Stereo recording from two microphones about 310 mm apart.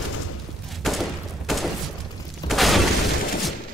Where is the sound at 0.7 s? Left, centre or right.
Centre.